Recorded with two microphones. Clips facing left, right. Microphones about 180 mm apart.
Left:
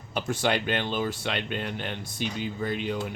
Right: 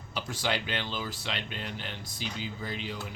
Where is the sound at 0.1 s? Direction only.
55° left (ahead or behind).